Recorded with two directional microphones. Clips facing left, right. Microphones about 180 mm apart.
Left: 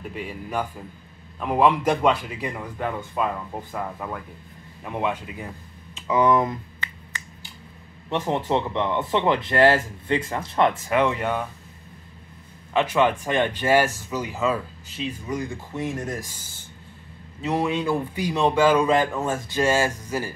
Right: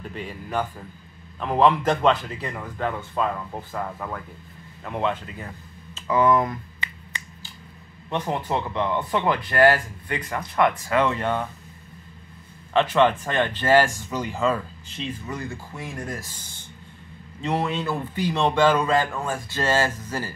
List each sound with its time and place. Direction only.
0.0 s speech: 10° left (ahead or behind)
8.1 s speech: 25° left (ahead or behind); by 11.4 s 10° left (ahead or behind)
12.7 s speech: 10° left (ahead or behind)
19.6 s speech: 10° left (ahead or behind)